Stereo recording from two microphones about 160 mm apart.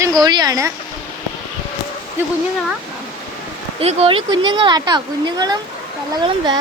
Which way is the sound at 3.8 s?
40° right (ahead or behind).